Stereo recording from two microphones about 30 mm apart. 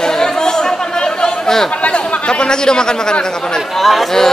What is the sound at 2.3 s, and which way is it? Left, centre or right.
A man's voice, left.